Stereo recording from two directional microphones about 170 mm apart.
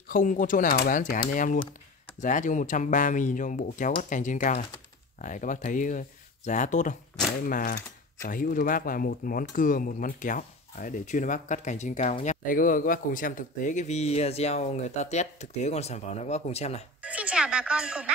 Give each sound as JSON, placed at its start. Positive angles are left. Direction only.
{"t": 0.1, "sound": "speech", "side_deg": 55}
{"t": 17.0, "sound": "speech", "side_deg": -5}